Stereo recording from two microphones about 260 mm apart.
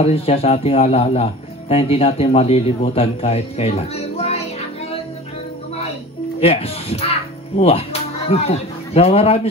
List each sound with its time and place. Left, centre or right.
0.0 s speech: left
6.4 s speech: left